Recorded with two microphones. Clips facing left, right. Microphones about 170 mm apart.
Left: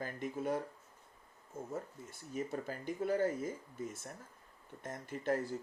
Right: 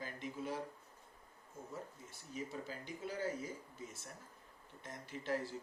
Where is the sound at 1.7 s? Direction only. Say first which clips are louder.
Left 5 dB; 50° left (ahead or behind).